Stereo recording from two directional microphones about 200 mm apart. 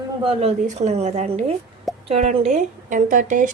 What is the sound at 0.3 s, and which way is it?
Speech, 35° right (ahead or behind).